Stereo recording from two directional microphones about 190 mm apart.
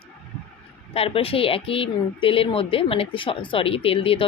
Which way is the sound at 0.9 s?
30° left (ahead or behind).